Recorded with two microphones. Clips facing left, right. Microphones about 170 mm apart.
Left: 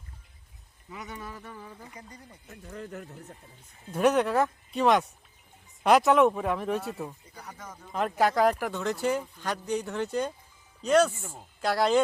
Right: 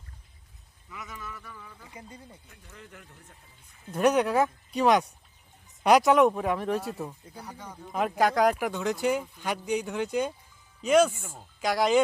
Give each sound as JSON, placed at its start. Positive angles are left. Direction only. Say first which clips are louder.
{"t": 0.9, "sound": "speech", "louder": "left 2 dB", "side_deg": 30}
{"t": 3.9, "sound": "speech", "louder": "even", "side_deg": 0}
{"t": 11.2, "sound": "speech", "louder": "left 1 dB", "side_deg": 10}
{"t": 11.6, "sound": "speech", "louder": "right 1 dB", "side_deg": -10}